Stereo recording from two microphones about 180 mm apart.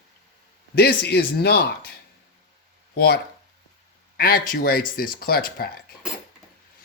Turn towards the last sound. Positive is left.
turn(degrees=55)  # may be behind; listen again after turning